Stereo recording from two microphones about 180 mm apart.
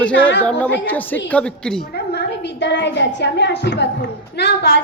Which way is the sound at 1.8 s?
60° left (ahead or behind).